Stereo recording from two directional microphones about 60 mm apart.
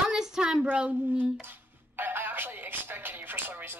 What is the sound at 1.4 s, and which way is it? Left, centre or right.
Speech, right.